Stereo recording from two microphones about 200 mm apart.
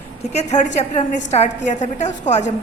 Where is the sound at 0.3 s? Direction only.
35° left (ahead or behind).